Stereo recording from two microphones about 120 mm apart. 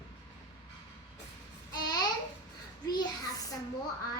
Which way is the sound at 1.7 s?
35° left (ahead or behind).